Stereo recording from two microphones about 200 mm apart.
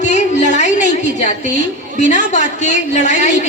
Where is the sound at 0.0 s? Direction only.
35° left (ahead or behind).